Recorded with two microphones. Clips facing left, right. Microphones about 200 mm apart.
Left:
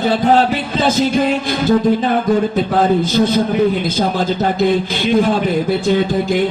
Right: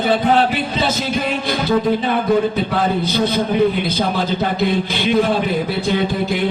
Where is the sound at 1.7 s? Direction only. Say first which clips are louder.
Left 4 dB; 45° left (ahead or behind).